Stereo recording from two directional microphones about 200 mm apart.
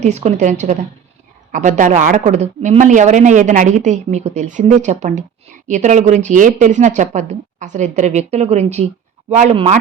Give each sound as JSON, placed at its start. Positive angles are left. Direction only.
{"t": 0.0, "sound": "speech", "side_deg": -35}